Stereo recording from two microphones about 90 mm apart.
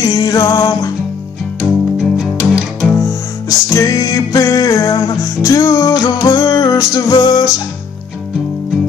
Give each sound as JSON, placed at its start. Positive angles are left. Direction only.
{"t": 0.0, "sound": "music", "side_deg": 45}
{"t": 1.6, "sound": "music", "side_deg": -5}
{"t": 3.4, "sound": "music", "side_deg": 40}